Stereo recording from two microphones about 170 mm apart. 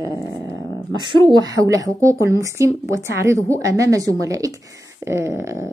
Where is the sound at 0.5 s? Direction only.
20° left (ahead or behind).